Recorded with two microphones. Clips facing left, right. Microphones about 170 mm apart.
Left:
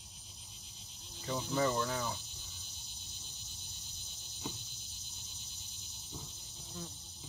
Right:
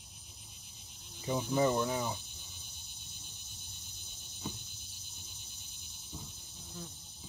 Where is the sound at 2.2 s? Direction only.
55° right (ahead or behind).